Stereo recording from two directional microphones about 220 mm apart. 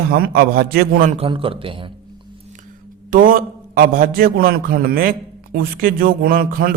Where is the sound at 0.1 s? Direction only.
40° right (ahead or behind).